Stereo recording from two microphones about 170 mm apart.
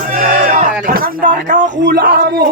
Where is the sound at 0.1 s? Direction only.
55° right (ahead or behind).